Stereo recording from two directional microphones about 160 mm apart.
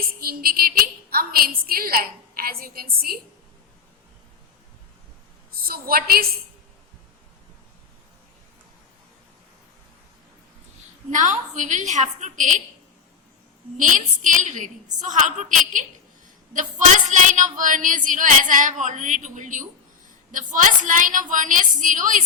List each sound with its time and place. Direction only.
0.2 s a woman's voice: 70° right (ahead or behind)
5.5 s a woman's voice: 65° right (ahead or behind)
11.1 s speech: 50° right (ahead or behind)
13.7 s a woman's voice: 55° right (ahead or behind)